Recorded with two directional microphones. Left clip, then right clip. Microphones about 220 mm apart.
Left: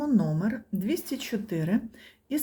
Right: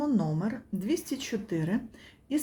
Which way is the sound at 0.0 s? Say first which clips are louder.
Left 2 dB; 15° left (ahead or behind).